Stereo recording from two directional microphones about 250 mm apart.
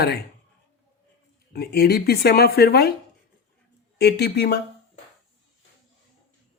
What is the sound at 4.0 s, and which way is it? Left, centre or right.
Speech, left.